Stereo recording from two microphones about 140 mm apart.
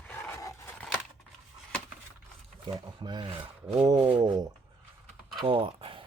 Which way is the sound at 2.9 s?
35° right (ahead or behind).